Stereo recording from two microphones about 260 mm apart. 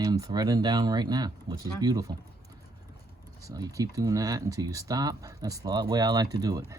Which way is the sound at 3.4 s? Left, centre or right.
Centre.